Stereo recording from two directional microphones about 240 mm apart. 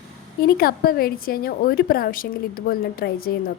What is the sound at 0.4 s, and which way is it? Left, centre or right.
A woman's voice, left.